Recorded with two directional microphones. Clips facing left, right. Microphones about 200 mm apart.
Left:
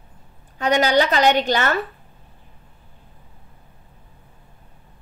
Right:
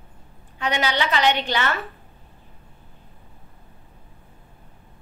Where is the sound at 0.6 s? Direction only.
40° left (ahead or behind).